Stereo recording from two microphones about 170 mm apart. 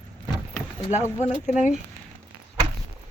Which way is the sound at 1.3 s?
40° left (ahead or behind).